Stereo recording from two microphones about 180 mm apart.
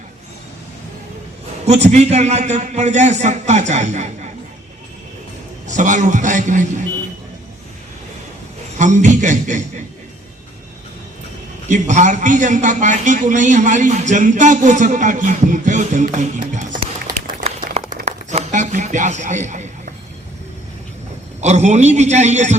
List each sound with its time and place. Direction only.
1.6 s a man's voice: 40° right (ahead or behind)
5.6 s a man's voice: 45° right (ahead or behind)
8.8 s a man's voice: 40° right (ahead or behind)
11.7 s a man's voice: 40° right (ahead or behind)
17.7 s a sound: 40° right (ahead or behind)
21.4 s a man's voice: 40° right (ahead or behind)